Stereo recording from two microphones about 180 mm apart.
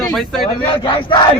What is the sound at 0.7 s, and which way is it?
Speech, 30° left (ahead or behind).